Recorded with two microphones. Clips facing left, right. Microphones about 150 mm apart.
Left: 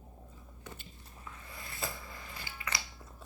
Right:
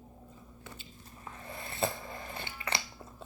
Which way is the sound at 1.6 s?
25° right (ahead or behind).